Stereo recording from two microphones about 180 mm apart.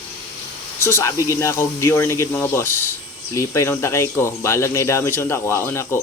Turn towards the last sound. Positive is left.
turn(degrees=15)  # may be behind; listen again after turning